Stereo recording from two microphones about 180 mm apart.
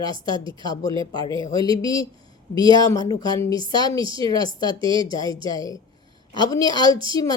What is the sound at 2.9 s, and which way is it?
A woman's voice, 20° left (ahead or behind).